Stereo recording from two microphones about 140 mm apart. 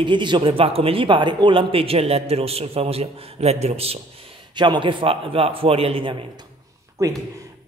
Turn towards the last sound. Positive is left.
turn(degrees=-20)  # may be behind; listen again after turning